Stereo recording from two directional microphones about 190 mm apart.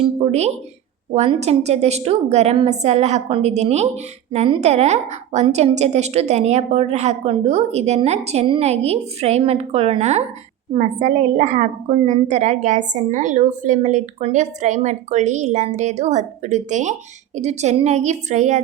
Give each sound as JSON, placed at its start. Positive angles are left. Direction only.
{"t": 0.0, "sound": "a woman's voice", "side_deg": -35}